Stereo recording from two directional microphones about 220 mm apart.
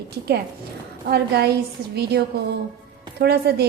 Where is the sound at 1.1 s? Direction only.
45° right (ahead or behind).